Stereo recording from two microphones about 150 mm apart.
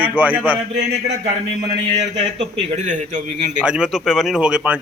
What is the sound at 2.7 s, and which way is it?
Speech, 55° right (ahead or behind).